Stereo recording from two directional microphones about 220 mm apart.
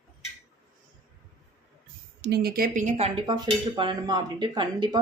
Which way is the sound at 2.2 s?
45° right (ahead or behind).